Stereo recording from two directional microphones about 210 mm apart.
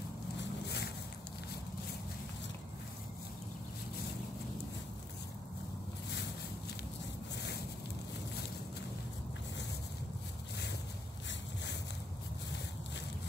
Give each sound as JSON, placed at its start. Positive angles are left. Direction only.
{"t": 0.4, "sound": "vehicle", "side_deg": 55}